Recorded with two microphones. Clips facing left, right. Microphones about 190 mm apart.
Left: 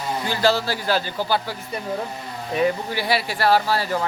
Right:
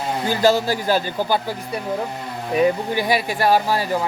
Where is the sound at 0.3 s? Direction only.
15° right (ahead or behind).